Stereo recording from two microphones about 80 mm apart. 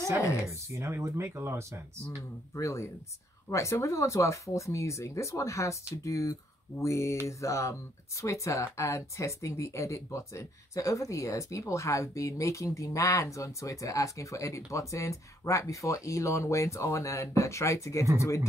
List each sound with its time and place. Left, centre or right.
0.5 s speech: right
2.5 s speech: left